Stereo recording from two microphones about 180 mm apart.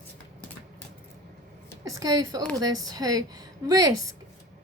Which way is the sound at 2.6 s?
20° right (ahead or behind).